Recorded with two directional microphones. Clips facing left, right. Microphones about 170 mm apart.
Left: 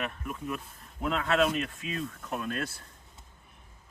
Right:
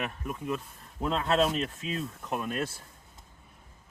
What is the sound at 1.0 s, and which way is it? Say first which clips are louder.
Speech: right 1 dB; 30° right (ahead or behind).